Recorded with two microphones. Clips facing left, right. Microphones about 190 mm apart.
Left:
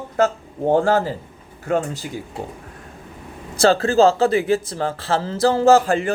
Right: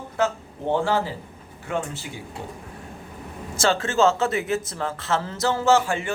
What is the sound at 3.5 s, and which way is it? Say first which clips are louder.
A man's voice: left 7 dB; 35° left (ahead or behind).